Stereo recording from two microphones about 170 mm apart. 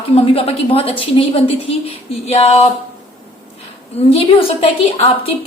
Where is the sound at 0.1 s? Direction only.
35° left (ahead or behind).